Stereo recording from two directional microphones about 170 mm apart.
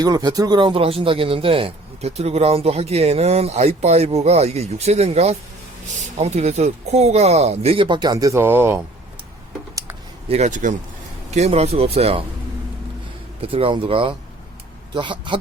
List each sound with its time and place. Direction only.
0.0 s speech: 25° right (ahead or behind)
10.2 s a man's voice: 40° right (ahead or behind)
13.4 s speech: 35° right (ahead or behind)